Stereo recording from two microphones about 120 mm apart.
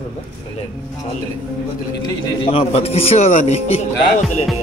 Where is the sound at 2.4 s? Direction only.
55° left (ahead or behind).